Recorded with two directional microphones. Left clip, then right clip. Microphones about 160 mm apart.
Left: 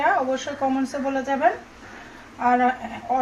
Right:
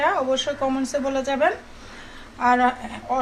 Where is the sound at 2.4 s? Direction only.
15° right (ahead or behind).